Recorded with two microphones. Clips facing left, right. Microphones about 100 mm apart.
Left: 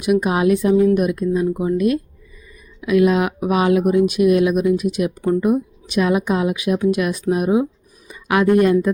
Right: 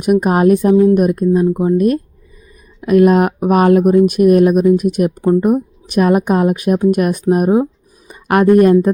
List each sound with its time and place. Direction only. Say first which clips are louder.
0.0 s a woman's voice: right 5 dB; 50° right (ahead or behind)